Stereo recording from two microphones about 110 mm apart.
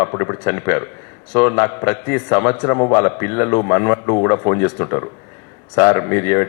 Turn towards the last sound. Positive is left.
turn(degrees=25)  # may be behind; listen again after turning